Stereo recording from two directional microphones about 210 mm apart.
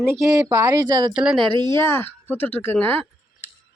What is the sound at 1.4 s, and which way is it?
Speech, 20° right (ahead or behind).